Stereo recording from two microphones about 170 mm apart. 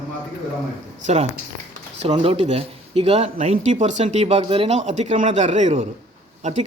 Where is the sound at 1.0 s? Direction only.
40° right (ahead or behind).